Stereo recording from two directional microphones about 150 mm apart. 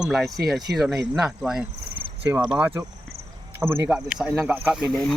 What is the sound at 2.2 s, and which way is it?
Speech, 20° right (ahead or behind).